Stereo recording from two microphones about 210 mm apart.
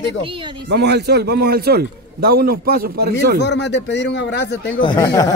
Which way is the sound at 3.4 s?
55° left (ahead or behind).